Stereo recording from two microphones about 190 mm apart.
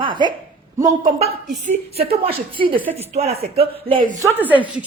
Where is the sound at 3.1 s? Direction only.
35° right (ahead or behind).